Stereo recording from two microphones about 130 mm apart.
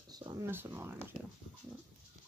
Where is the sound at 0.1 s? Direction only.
35° right (ahead or behind).